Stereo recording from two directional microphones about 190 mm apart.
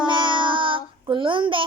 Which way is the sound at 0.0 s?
25° right (ahead or behind).